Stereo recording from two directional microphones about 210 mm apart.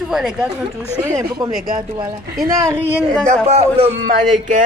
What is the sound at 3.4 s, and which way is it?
A man's voice, 30° right (ahead or behind).